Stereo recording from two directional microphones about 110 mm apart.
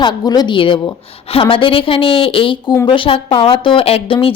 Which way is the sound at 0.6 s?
50° left (ahead or behind).